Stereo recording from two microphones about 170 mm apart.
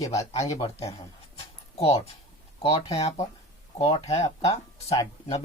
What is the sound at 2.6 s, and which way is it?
Speech, 35° left (ahead or behind).